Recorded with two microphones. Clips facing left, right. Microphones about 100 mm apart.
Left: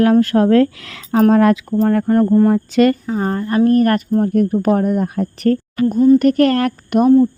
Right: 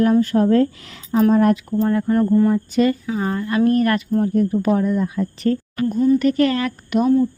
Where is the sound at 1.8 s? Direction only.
45° left (ahead or behind).